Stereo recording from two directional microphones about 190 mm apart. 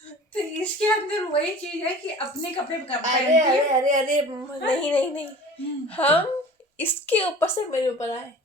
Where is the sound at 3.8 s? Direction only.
40° right (ahead or behind).